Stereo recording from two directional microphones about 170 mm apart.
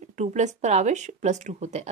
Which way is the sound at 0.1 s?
45° right (ahead or behind).